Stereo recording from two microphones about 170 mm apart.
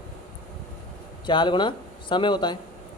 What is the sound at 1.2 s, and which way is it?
Speech, 25° left (ahead or behind).